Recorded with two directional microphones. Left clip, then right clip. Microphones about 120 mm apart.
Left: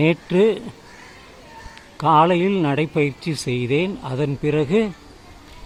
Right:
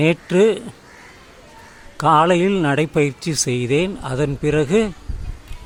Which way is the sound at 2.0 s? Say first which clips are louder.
Right 1 dB; 35° right (ahead or behind).